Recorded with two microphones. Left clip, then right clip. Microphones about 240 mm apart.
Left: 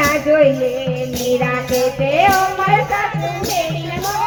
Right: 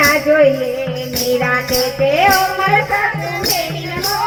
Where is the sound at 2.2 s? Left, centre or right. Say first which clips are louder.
Even; right.